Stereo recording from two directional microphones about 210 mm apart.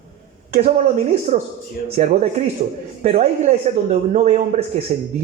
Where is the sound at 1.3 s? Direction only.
35° right (ahead or behind).